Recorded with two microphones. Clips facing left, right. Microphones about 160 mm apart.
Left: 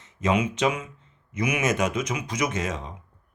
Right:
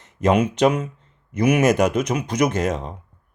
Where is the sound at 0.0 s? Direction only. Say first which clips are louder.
Right 6 dB; 65° right (ahead or behind).